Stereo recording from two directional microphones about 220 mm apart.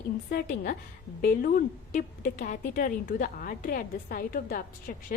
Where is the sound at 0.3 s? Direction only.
40° left (ahead or behind).